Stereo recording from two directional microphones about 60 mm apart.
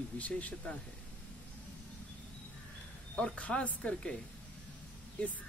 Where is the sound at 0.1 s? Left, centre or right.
Left.